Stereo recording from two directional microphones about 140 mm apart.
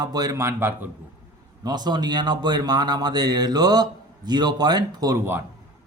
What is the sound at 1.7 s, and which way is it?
Speech, 30° right (ahead or behind).